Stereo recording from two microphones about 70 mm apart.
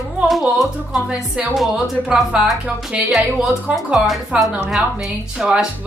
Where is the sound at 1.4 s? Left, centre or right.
Centre.